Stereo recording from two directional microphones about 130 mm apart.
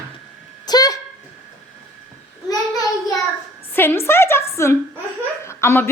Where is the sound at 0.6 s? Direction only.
30° left (ahead or behind).